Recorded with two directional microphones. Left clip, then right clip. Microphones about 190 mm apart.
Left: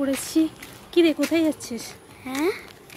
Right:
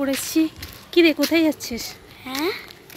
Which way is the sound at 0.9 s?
20° right (ahead or behind).